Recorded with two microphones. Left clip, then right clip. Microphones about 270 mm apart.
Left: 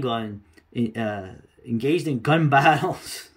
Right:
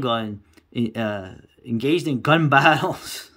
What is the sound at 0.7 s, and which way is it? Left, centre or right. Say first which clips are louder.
Speech: right 2 dB; centre.